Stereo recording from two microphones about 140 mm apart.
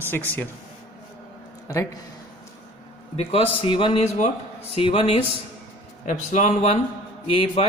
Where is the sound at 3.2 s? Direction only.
45° left (ahead or behind).